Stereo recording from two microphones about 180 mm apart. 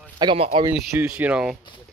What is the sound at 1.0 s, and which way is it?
Speech, 10° right (ahead or behind).